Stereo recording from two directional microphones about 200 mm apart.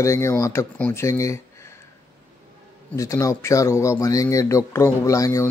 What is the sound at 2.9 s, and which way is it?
Speech, 15° left (ahead or behind).